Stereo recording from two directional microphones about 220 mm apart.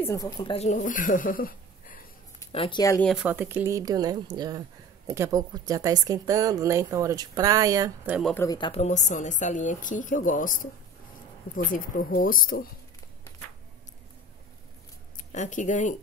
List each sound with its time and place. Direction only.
0.0 s speech: 15° left (ahead or behind); by 2.0 s 40° left (ahead or behind)
2.5 s speech: 25° left (ahead or behind)
3.1 s speech: 5° right (ahead or behind)
8.2 s speech: 5° left (ahead or behind)
8.5 s speech: 20° left (ahead or behind); by 12.6 s 40° left (ahead or behind)
15.3 s speech: 35° left (ahead or behind)